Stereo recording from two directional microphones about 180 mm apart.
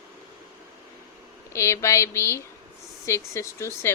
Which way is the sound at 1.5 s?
15° left (ahead or behind).